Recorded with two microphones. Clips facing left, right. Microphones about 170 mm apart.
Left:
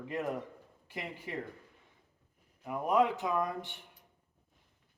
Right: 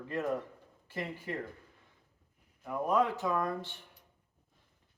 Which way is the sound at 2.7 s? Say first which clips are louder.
Left 1 dB; 20° left (ahead or behind).